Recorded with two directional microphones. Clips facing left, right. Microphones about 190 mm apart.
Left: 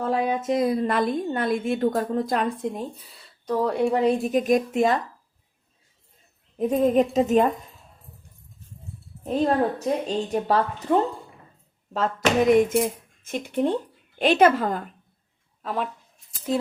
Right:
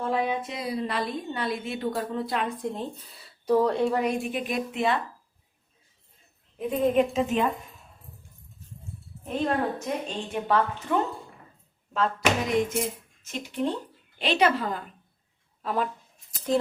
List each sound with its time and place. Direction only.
0.0 s a woman's voice: 40° left (ahead or behind)
2.7 s speech: 10° left (ahead or behind)
3.8 s a woman's voice: 15° left (ahead or behind)
4.0 s a woman's voice: 35° left (ahead or behind)
6.6 s a woman's voice: 40° left (ahead or behind)
9.2 s a woman's voice: 35° left (ahead or behind)
12.5 s a woman's voice: 50° left (ahead or behind)
15.6 s speech: centre (ahead or behind)